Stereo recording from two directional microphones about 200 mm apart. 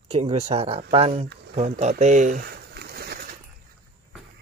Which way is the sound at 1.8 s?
35° right (ahead or behind).